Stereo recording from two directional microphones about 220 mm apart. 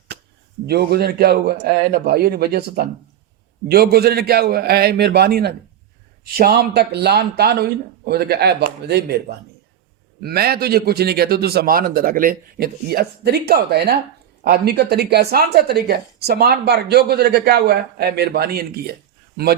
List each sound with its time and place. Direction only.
0.7 s speech: 45° right (ahead or behind)
10.2 s speech: 45° right (ahead or behind)